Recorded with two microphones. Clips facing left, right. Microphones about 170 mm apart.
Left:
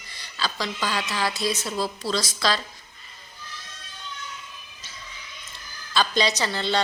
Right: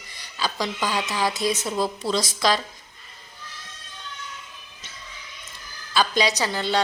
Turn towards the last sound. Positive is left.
turn(degrees=-10)  # may be behind; listen again after turning